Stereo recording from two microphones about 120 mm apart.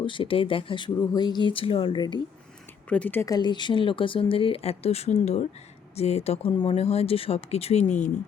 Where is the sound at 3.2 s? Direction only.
35° left (ahead or behind); by 6.5 s 60° left (ahead or behind).